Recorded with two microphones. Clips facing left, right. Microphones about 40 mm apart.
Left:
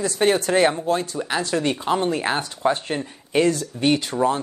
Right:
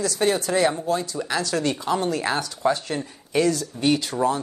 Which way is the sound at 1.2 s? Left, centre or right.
Left.